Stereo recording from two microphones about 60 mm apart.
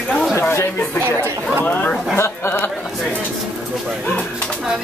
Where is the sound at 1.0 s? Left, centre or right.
Right.